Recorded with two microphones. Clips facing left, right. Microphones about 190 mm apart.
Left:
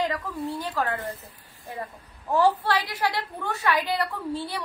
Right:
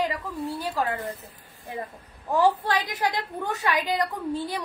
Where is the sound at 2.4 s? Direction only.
15° right (ahead or behind).